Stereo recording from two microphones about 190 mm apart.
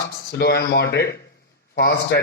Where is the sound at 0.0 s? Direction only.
55° left (ahead or behind).